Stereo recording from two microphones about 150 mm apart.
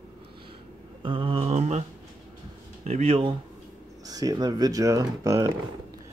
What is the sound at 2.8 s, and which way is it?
Speech, 45° right (ahead or behind).